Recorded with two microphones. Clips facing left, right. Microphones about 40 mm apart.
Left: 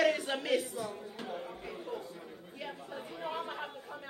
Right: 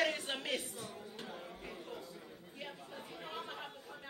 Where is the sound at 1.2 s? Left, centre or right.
Left.